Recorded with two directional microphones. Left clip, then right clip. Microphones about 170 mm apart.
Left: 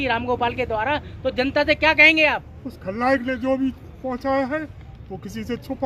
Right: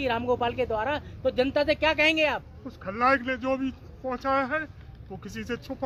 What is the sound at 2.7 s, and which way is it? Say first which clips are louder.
Speech: left 2 dB; 5° right (ahead or behind).